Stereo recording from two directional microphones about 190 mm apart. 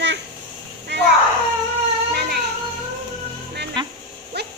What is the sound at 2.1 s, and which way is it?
Music, 55° right (ahead or behind).